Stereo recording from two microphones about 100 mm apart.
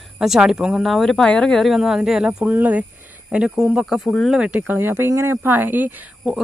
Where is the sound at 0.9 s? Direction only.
Centre (ahead or behind).